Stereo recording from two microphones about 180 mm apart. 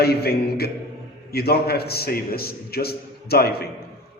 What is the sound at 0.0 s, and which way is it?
A man's voice, 60° left (ahead or behind).